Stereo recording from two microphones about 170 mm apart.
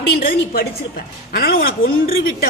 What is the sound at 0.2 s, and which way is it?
A woman's voice, 65° left (ahead or behind).